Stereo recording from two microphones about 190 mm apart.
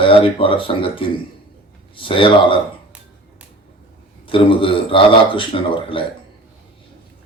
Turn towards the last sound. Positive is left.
turn(degrees=25)  # may be behind; listen again after turning